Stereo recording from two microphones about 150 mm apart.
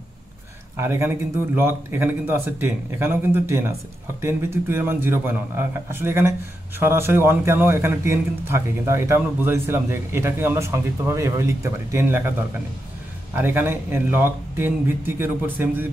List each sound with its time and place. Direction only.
0.7 s a man's voice: 15° right (ahead or behind)
13.3 s a man's voice: 15° right (ahead or behind)